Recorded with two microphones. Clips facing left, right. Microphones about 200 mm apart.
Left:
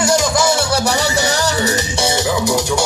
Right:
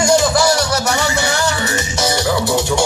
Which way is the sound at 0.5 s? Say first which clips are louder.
Left 1 dB; 30° left (ahead or behind).